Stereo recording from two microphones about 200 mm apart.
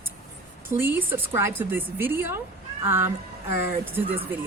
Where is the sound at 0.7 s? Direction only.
10° right (ahead or behind).